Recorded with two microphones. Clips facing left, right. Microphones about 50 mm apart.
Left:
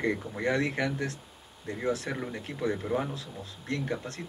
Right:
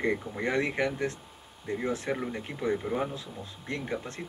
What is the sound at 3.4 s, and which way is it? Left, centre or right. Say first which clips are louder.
Speech: left 3 dB; centre.